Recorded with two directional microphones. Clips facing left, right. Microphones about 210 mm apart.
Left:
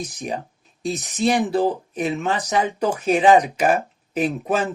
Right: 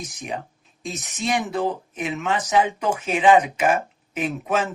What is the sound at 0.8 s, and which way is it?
Speech, 35° left (ahead or behind).